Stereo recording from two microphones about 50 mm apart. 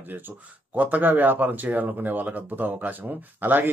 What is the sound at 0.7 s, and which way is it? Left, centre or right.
Speech, right.